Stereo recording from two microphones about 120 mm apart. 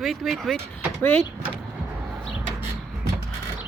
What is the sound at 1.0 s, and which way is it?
Speech, 15° left (ahead or behind).